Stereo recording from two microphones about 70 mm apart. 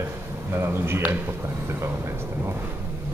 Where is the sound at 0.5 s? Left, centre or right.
Right.